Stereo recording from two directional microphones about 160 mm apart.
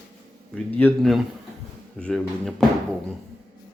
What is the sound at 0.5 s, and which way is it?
Speech, 10° left (ahead or behind).